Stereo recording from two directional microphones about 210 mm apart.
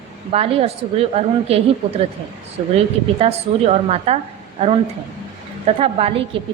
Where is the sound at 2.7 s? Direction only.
30° right (ahead or behind).